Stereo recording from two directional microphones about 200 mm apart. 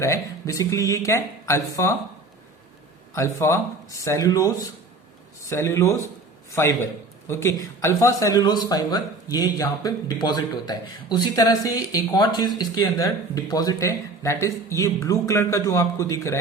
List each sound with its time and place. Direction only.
0.0 s a man's voice: 15° left (ahead or behind)
3.2 s a man's voice: 15° left (ahead or behind)